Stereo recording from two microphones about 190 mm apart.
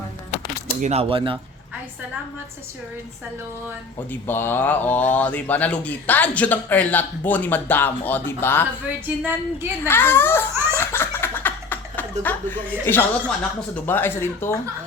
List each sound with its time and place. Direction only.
0.8 s speech: 35° right (ahead or behind)
3.9 s speech: 10° left (ahead or behind)
9.0 s speech: 10° right (ahead or behind)
9.8 s speech: 10° left (ahead or behind)
10.8 s laughter: 10° left (ahead or behind)
13.8 s speech: 10° left (ahead or behind)